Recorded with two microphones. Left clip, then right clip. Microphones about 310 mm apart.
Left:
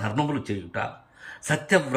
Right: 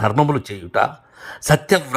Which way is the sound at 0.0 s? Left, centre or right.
Centre.